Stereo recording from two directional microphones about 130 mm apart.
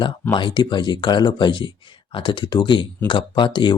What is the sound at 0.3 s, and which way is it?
Speech, 35° left (ahead or behind).